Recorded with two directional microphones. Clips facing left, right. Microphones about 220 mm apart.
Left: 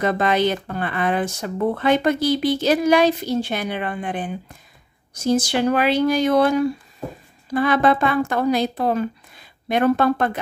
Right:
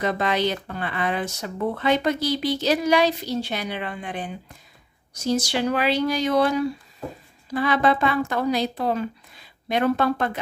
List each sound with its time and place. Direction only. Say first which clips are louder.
0.0 s speech: left 4 dB; 50° left (ahead or behind)